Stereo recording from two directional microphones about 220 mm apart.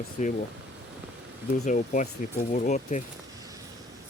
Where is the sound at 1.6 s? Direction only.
35° left (ahead or behind).